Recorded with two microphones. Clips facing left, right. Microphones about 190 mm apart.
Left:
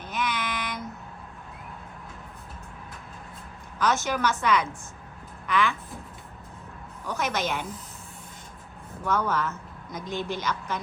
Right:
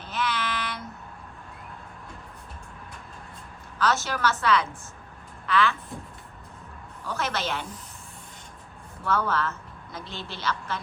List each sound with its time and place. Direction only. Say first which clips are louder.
0.0 s child singing: right 1 dB; 15° left (ahead or behind)
3.8 s a woman's voice: left 1 dB; 15° left (ahead or behind)
7.0 s a woman's voice: left 1 dB; 15° left (ahead or behind)
9.0 s a woman's voice: even; 15° left (ahead or behind)